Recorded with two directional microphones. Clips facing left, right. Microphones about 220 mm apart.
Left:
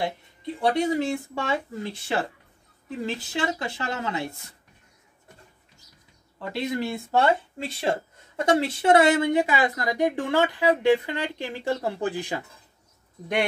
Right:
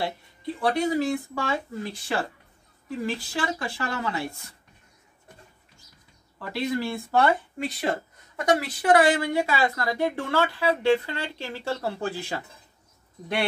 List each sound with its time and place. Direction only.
0.6 s speech: 25° left (ahead or behind)
6.4 s speech: 20° left (ahead or behind)